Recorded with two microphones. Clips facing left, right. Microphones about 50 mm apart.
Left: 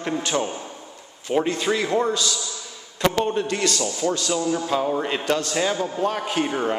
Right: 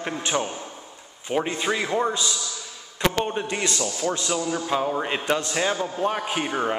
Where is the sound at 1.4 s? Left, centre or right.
Centre.